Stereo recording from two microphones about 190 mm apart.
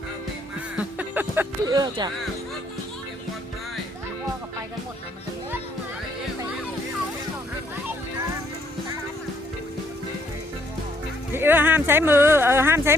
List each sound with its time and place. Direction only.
0.8 s music: 10° right (ahead or behind)
1.7 s speech: 20° right (ahead or behind)
11.3 s speech: 10° right (ahead or behind)